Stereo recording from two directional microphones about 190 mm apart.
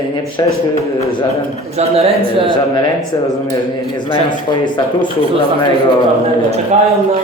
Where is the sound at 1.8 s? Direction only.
30° right (ahead or behind).